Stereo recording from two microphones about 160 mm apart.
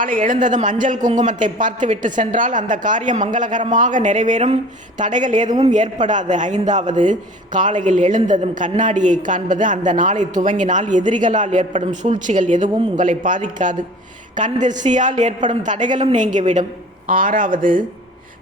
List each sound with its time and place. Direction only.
0.0 s a woman's voice: 60° right (ahead or behind)